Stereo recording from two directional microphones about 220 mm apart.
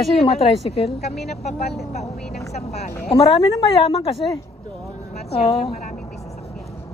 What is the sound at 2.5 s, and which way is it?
Speech, 30° left (ahead or behind).